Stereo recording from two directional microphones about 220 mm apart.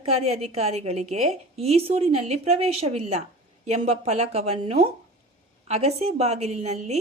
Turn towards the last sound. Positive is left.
turn(degrees=-30)  # may be behind; listen again after turning